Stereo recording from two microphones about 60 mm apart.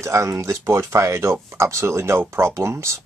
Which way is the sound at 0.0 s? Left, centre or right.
Right.